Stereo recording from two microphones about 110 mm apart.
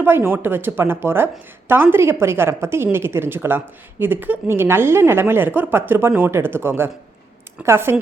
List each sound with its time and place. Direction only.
0.0 s a woman's voice: 20° right (ahead or behind)